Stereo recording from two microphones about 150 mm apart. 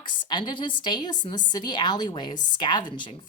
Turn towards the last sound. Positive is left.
turn(degrees=35)  # may be behind; listen again after turning